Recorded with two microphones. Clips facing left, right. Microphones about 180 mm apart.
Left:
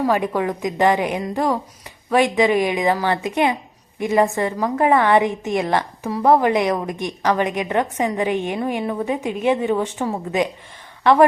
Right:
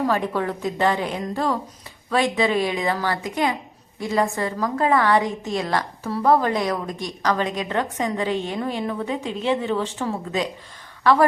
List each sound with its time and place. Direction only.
0.0 s a woman's voice: 10° left (ahead or behind)